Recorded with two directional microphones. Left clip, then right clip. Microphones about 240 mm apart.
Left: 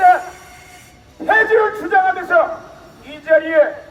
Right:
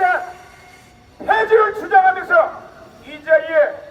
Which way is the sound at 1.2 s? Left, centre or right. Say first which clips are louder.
Left 1 dB; right.